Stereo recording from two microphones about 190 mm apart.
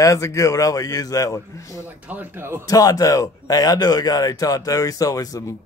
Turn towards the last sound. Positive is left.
turn(degrees=20)  # may be behind; listen again after turning